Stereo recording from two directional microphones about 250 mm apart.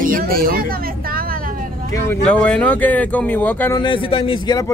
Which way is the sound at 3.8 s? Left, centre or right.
Left.